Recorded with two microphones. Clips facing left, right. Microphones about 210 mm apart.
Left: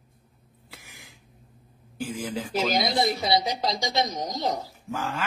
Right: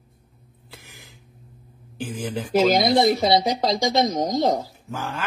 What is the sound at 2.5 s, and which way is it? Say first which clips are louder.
A woman's voice: right 8 dB; 55° right (ahead or behind).